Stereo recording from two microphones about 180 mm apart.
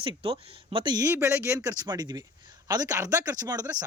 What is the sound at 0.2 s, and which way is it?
Speech, 30° right (ahead or behind).